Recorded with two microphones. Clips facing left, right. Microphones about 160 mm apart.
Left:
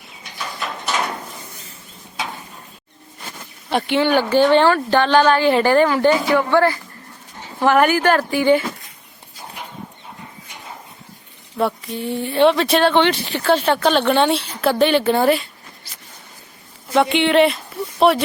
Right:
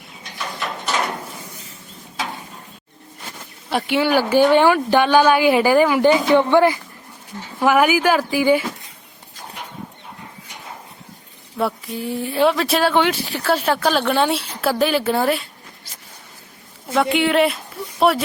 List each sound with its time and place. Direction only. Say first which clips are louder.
3.7 s a woman's voice: left 1 dB; 5° right (ahead or behind)
11.5 s speech: left 2 dB; centre (ahead or behind)
16.9 s speech: left 2 dB; centre (ahead or behind)